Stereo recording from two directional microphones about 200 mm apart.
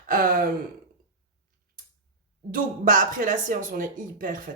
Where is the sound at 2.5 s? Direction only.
40° right (ahead or behind).